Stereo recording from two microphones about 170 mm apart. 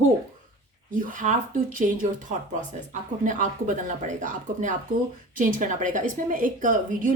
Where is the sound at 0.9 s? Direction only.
50° right (ahead or behind).